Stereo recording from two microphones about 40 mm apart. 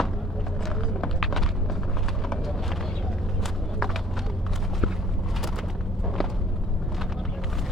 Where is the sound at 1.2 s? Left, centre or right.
Centre.